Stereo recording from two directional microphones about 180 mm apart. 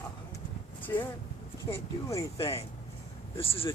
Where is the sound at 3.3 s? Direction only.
30° left (ahead or behind).